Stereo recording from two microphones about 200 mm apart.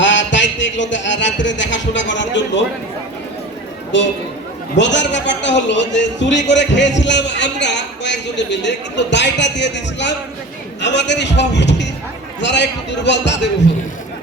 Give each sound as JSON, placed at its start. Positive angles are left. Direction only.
{"t": 0.0, "sound": "speech", "side_deg": 65}
{"t": 3.9, "sound": "a man's voice", "side_deg": 65}